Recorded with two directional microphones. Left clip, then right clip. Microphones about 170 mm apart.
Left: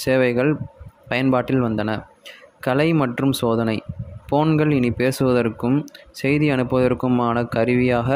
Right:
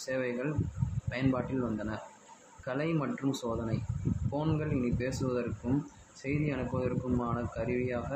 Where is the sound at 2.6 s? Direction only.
70° left (ahead or behind).